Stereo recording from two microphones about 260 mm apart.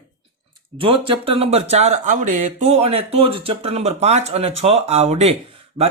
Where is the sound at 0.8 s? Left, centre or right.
Centre.